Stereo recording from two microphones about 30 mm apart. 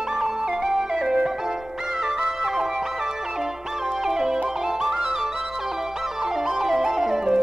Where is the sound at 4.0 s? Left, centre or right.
Centre.